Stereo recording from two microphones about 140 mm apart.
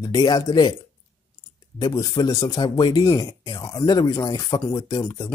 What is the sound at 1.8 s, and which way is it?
Speech, 30° left (ahead or behind).